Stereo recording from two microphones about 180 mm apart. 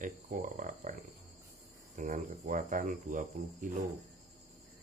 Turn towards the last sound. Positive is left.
turn(degrees=-45)  # may be behind; listen again after turning